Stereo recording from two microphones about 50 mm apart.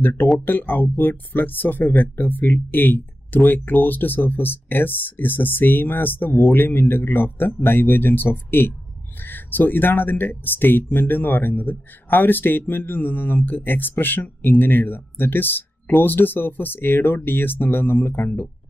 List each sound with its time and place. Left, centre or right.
0.0 s speech: left